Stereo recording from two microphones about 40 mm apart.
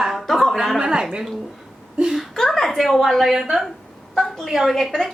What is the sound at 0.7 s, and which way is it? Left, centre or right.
Speech, right.